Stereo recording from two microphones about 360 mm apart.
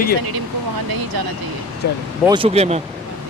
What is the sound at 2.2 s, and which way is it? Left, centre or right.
Speech, centre.